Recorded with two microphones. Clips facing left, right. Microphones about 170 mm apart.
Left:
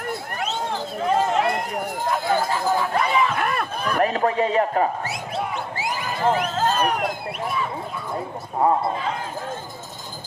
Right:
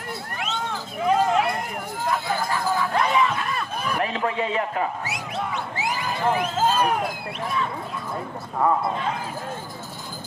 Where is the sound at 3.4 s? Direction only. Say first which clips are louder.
Left 4 dB; 60° left (ahead or behind).